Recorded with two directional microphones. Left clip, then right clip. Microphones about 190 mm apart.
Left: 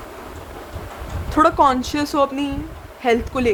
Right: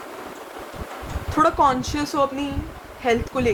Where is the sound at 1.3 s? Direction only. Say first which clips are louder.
Left 3 dB; 50° left (ahead or behind).